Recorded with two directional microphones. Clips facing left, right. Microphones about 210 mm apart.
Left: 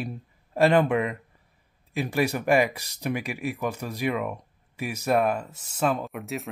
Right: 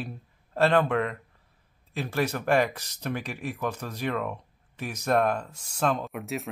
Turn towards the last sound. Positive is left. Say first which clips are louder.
# even
turn(degrees=0)  # may be behind; listen again after turning